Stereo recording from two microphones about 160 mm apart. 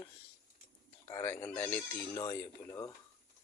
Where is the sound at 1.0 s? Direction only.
20° left (ahead or behind).